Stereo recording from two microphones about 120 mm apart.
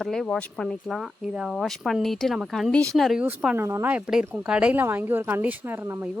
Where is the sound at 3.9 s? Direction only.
10° right (ahead or behind).